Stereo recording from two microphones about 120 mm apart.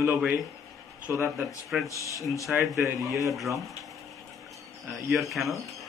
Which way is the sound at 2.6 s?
25° right (ahead or behind).